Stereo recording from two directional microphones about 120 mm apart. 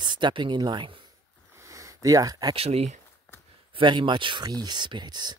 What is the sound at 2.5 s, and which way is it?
Speech, 55° right (ahead or behind).